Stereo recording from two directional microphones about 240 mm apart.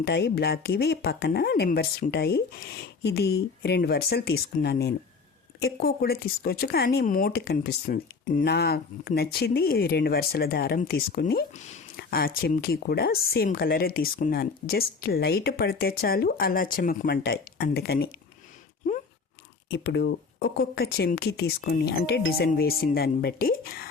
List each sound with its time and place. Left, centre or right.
0.0 s speech: left
19.7 s speech: left